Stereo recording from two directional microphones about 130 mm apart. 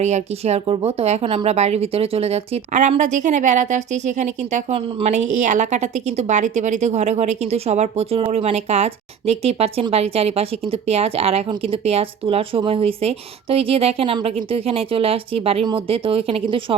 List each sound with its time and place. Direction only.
0.0 s a woman's voice: 55° right (ahead or behind); by 16.7 s 40° right (ahead or behind)